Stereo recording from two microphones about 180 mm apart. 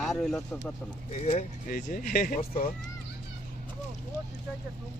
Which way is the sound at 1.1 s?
40° left (ahead or behind).